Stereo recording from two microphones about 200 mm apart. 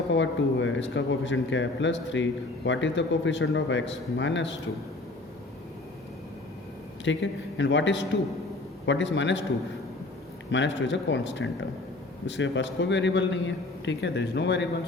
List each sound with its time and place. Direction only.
0.1 s a man's voice: 70° left (ahead or behind)
7.0 s a man's voice: 65° left (ahead or behind)
10.5 s a man's voice: 65° left (ahead or behind)